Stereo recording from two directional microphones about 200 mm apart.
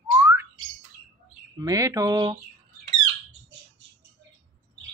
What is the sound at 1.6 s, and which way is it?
Speech, 15° right (ahead or behind).